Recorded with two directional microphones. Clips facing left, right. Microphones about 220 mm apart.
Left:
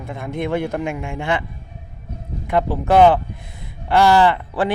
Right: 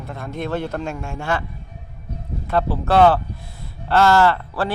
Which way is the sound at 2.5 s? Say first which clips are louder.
Left 2 dB; 15° left (ahead or behind).